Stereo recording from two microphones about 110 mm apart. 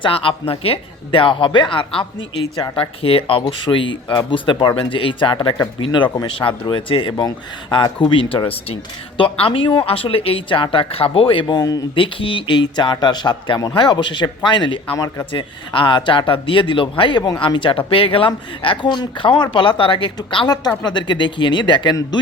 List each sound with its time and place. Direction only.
0.0 s speech: 55° left (ahead or behind)
7.2 s speech: 45° left (ahead or behind)
11.9 s speech: 50° left (ahead or behind)